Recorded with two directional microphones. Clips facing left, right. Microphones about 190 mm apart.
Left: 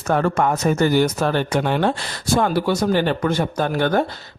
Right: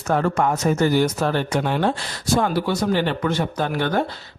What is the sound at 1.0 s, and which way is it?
Speech, 70° left (ahead or behind).